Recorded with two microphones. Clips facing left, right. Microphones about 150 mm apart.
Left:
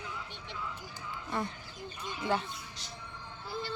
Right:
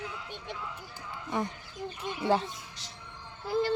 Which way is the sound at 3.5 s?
90° right.